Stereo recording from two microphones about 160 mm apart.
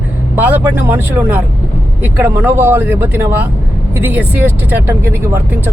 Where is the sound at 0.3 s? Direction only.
10° right (ahead or behind).